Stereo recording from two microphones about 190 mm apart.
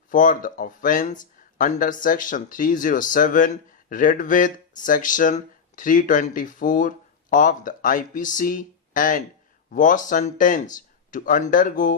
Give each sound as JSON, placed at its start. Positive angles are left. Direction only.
{"t": 0.1, "sound": "speech", "side_deg": 45}